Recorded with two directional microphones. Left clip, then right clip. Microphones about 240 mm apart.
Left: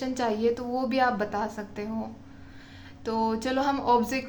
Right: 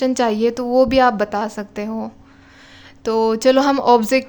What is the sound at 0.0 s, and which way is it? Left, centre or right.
A woman's voice, right.